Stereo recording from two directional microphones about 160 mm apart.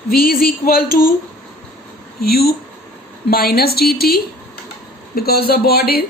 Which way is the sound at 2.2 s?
75° left (ahead or behind).